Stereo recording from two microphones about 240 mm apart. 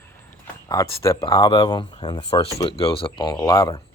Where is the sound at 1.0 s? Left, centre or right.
Centre.